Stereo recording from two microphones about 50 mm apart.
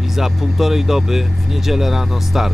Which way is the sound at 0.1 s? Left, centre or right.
Centre.